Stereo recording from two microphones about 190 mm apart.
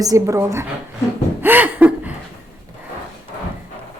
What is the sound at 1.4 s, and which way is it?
Chuckle, 10° right (ahead or behind).